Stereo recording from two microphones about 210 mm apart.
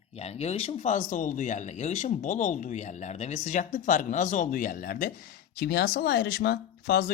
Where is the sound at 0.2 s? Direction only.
30° left (ahead or behind).